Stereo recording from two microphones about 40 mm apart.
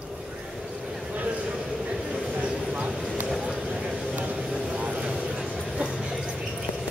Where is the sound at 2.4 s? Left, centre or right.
Right.